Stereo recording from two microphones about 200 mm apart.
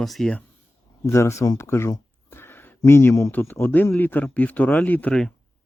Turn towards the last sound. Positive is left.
turn(degrees=5)  # may be behind; listen again after turning